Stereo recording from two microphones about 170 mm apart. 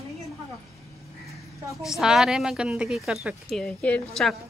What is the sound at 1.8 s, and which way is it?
Speech, 5° right (ahead or behind).